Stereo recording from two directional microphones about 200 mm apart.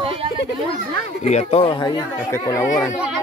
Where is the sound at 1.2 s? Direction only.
35° left (ahead or behind); by 2.9 s 15° left (ahead or behind).